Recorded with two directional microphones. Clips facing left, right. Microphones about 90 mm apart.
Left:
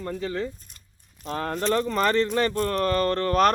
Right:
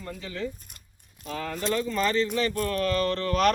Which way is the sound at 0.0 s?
40° left (ahead or behind).